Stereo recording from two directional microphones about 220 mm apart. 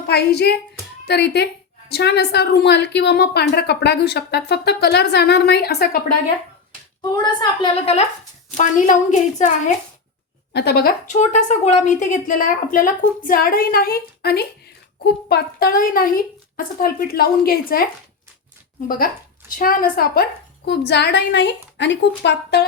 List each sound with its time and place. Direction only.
0.1 s a woman's voice: 45° left (ahead or behind)
7.1 s a woman's voice: 20° left (ahead or behind)
8.5 s a woman's voice: 35° left (ahead or behind)
10.5 s a woman's voice: 50° left (ahead or behind)
19.5 s a woman's voice: 40° left (ahead or behind)